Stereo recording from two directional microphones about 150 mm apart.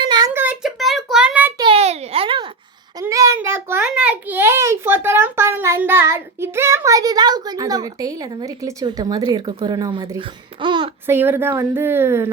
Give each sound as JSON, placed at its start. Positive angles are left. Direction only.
{"t": 0.0, "sound": "child singing", "side_deg": -30}
{"t": 0.3, "sound": "child singing", "side_deg": -10}
{"t": 1.5, "sound": "a sound", "side_deg": -35}
{"t": 3.0, "sound": "a sound", "side_deg": -20}
{"t": 9.6, "sound": "speech", "side_deg": -30}
{"t": 10.2, "sound": "speech", "side_deg": -35}
{"t": 11.0, "sound": "speech", "side_deg": -15}